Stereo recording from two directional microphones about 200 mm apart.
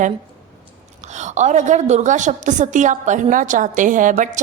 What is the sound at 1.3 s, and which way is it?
Speech, 35° right (ahead or behind).